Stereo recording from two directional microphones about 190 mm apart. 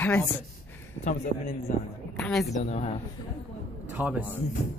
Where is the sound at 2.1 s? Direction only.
Centre (ahead or behind).